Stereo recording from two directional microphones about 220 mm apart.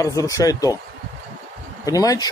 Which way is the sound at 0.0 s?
15° left (ahead or behind).